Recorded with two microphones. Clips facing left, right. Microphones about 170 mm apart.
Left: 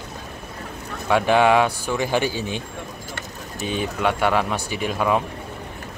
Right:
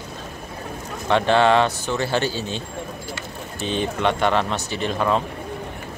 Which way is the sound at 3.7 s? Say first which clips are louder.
Right 1 dB; 5° left (ahead or behind).